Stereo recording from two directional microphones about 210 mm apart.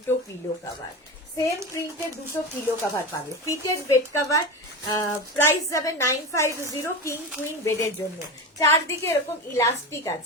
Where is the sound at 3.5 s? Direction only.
15° left (ahead or behind).